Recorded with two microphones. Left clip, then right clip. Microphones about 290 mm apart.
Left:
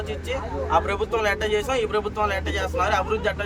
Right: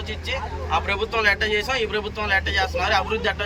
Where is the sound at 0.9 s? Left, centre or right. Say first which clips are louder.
Right 3 dB; centre.